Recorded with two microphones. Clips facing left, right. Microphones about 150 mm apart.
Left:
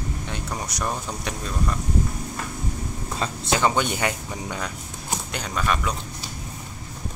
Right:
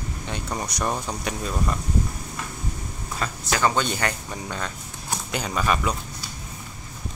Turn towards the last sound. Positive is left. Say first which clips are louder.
# right 2 dB
turn(degrees=-5)  # may be behind; listen again after turning